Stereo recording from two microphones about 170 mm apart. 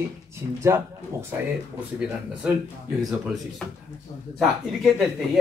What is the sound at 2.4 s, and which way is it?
Speech, 10° right (ahead or behind).